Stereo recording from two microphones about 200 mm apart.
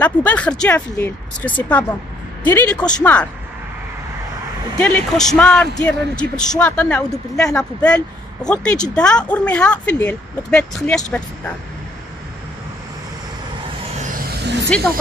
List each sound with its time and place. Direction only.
0.0 s speech: 5° left (ahead or behind)
4.7 s speech: 5° left (ahead or behind)
14.4 s vehicle: 60° right (ahead or behind)